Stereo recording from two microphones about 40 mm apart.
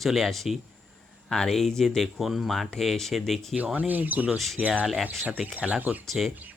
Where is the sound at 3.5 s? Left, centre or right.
Right.